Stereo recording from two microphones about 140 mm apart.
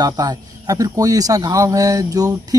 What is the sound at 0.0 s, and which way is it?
Speech, 30° right (ahead or behind).